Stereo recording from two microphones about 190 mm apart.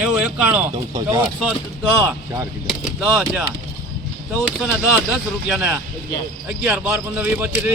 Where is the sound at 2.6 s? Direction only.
5° right (ahead or behind).